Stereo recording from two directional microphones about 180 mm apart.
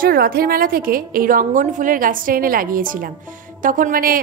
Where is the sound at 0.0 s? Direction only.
55° right (ahead or behind).